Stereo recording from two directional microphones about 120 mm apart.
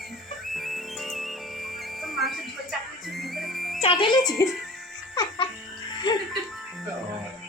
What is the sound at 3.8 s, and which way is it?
Music, 45° left (ahead or behind).